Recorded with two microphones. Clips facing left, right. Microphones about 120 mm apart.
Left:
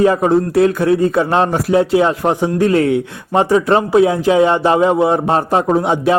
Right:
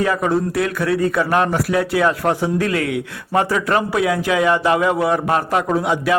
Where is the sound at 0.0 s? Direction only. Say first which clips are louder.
Left 6 dB; 30° left (ahead or behind).